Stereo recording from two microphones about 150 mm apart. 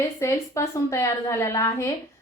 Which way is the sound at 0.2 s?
20° left (ahead or behind).